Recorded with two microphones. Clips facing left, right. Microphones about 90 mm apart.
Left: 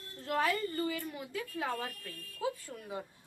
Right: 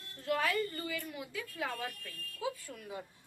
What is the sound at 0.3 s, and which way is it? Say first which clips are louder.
Speech: left 1 dB; 35° left (ahead or behind).